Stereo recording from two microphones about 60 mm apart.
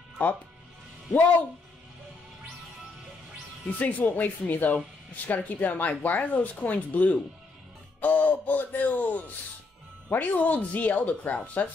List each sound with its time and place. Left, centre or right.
3.6 s speech: left